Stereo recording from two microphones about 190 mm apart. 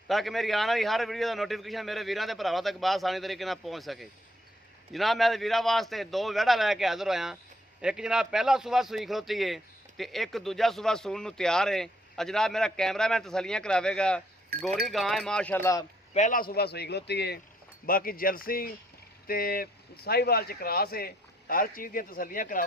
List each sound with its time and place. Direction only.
0.1 s speech: centre (ahead or behind)
16.1 s a man's voice: 45° left (ahead or behind)